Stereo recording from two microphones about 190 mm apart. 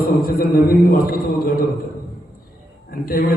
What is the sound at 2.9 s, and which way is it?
Speech, 50° left (ahead or behind).